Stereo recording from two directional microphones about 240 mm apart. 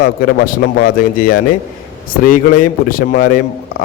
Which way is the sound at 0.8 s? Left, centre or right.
Left.